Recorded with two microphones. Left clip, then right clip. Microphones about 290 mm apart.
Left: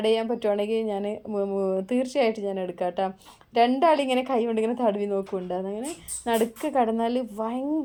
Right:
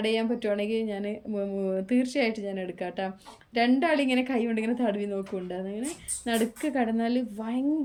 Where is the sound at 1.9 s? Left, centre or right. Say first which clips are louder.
Left 2 dB; centre.